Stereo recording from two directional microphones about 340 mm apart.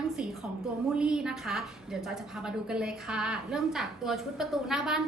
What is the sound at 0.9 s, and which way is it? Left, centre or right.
A woman's voice, centre.